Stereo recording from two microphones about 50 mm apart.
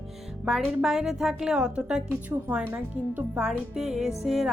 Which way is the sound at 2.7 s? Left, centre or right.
Right.